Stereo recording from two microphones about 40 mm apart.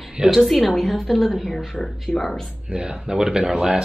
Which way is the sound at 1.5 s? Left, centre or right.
Centre.